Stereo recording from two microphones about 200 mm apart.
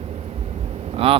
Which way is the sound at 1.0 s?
30° right (ahead or behind).